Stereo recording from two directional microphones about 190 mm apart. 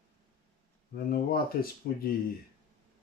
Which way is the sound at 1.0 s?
50° left (ahead or behind).